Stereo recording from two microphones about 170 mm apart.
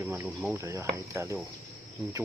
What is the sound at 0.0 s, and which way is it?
Speech, 10° right (ahead or behind).